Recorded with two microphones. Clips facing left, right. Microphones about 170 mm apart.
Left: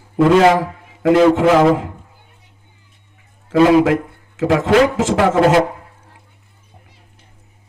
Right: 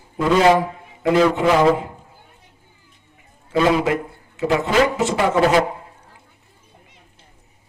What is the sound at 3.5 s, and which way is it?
A man's voice, 80° left.